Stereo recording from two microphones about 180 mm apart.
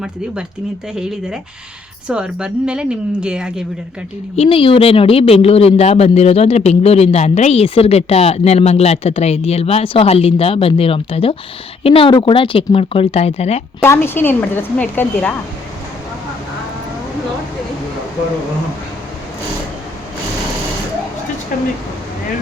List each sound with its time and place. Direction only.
2.0 s speech: 5° right (ahead or behind)
4.4 s speech: 30° left (ahead or behind)
13.8 s a woman's voice: 15° left (ahead or behind)
21.5 s speech: 50° left (ahead or behind)